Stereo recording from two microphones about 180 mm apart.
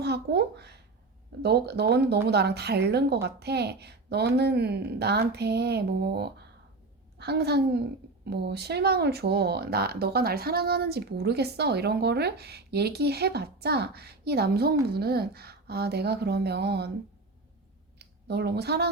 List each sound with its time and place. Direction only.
0.0 s speech: 65° right (ahead or behind)
18.0 s speech: 65° right (ahead or behind)